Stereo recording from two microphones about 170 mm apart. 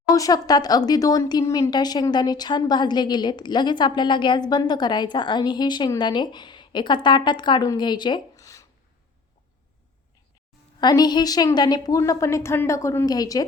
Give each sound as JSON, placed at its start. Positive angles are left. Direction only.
{"t": 0.1, "sound": "speech", "side_deg": 20}
{"t": 10.8, "sound": "speech", "side_deg": 25}